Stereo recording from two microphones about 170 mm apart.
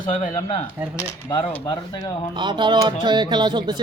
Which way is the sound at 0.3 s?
25° left (ahead or behind).